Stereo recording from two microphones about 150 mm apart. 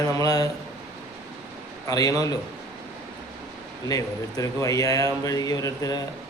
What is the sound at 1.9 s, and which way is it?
Speech, 25° left (ahead or behind).